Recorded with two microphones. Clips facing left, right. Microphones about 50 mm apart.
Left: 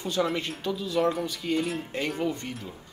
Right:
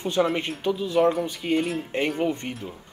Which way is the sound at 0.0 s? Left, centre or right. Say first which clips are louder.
Right 4 dB; right.